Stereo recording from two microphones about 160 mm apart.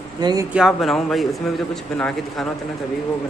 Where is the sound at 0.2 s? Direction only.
25° right (ahead or behind).